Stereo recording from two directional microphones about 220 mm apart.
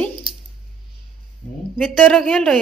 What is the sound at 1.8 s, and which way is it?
Speech, 5° left (ahead or behind).